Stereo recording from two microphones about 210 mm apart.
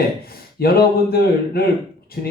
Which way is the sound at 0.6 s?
45° left (ahead or behind).